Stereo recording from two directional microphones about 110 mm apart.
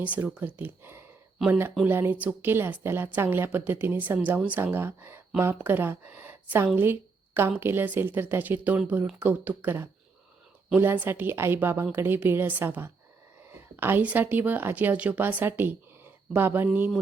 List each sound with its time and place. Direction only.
0.0 s speech: 15° right (ahead or behind)